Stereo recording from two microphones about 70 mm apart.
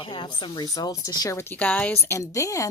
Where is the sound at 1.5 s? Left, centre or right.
Centre.